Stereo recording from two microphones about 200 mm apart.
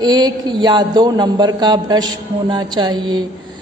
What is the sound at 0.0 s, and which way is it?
A man's voice, 20° right (ahead or behind).